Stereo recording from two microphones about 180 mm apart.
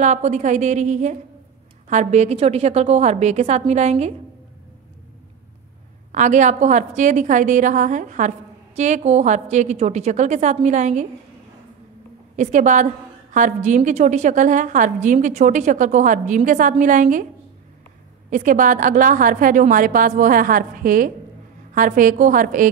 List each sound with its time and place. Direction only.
0.0 s a woman's voice: 40° right (ahead or behind)
6.1 s a woman's voice: 40° right (ahead or behind)
12.4 s a woman's voice: 40° right (ahead or behind)
18.3 s a woman's voice: 45° right (ahead or behind)